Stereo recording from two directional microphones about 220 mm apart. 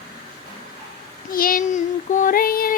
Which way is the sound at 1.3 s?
40° left (ahead or behind).